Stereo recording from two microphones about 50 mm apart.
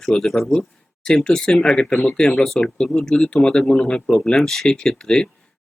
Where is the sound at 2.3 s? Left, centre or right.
Centre.